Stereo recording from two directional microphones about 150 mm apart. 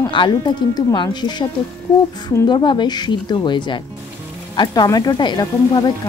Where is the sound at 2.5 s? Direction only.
30° left (ahead or behind).